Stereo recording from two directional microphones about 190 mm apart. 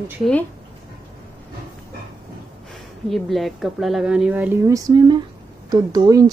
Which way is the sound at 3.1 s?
Centre (ahead or behind).